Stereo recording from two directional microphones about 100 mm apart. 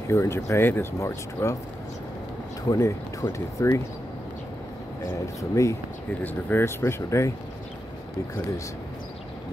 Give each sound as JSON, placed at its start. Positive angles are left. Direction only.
{"t": 0.1, "sound": "speech", "side_deg": 30}
{"t": 2.7, "sound": "speech", "side_deg": 35}
{"t": 5.2, "sound": "speech", "side_deg": 30}